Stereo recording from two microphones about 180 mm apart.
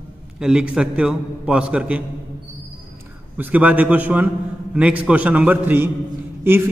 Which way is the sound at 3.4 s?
10° right (ahead or behind).